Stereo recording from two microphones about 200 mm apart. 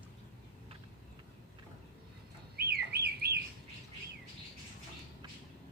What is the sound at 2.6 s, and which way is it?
Bird, 50° right (ahead or behind).